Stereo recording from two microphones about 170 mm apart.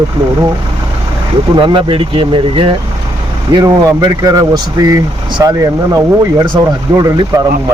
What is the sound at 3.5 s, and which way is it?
Speech, 20° right (ahead or behind).